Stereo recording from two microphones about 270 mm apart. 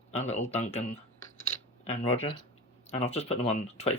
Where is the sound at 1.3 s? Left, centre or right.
Left.